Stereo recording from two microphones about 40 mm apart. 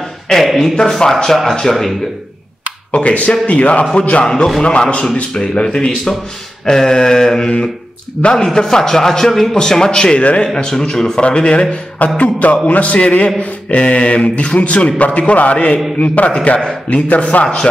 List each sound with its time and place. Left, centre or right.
0.3 s speech: centre
0.7 s a man's voice: centre
2.9 s speech: left
4.2 s a man's voice: left
8.5 s a man's voice: centre
12.2 s speech: left
16.9 s speech: left